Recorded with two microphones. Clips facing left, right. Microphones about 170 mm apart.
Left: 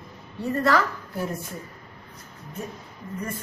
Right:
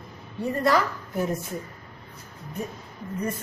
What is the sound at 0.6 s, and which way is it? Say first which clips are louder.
Speech: even; 15° right (ahead or behind).